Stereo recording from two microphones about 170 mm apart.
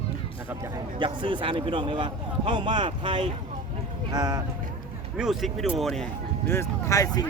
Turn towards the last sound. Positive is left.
turn(degrees=20)  # may be behind; listen again after turning